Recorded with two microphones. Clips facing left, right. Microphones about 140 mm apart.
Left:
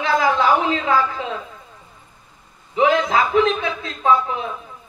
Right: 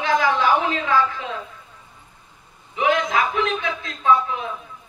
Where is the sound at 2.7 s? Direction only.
30° left (ahead or behind).